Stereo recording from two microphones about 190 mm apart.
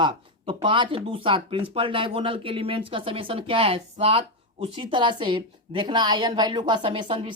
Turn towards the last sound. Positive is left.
turn(degrees=-25)  # may be behind; listen again after turning